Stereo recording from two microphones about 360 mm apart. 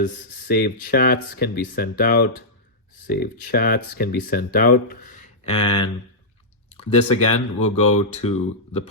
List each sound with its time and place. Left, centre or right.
0.0 s speech: left